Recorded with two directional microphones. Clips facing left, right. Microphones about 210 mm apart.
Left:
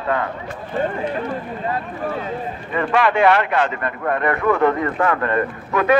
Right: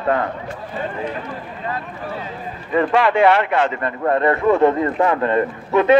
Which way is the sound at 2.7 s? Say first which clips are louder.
Right 2 dB; 25° right (ahead or behind).